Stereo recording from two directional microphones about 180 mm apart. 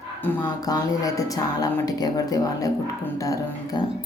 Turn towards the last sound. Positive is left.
turn(degrees=20)  # may be behind; listen again after turning